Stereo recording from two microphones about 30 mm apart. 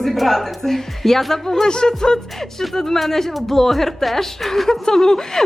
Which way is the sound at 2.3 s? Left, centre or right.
Centre.